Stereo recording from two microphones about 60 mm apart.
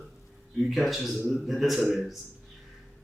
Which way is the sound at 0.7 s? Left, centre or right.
Centre.